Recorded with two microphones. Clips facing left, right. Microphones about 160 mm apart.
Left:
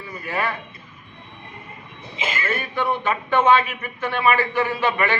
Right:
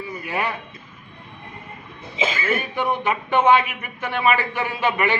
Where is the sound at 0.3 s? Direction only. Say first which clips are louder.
Left 1 dB; 15° right (ahead or behind).